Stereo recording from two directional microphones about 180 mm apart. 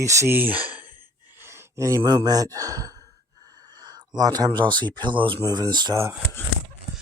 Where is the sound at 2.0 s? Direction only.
20° right (ahead or behind).